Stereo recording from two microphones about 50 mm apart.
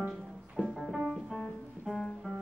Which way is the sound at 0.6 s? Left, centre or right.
Left.